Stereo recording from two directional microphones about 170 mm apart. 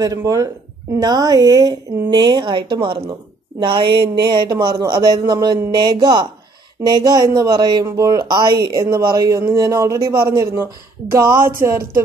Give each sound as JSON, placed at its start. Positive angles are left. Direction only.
{"t": 0.0, "sound": "speech", "side_deg": -20}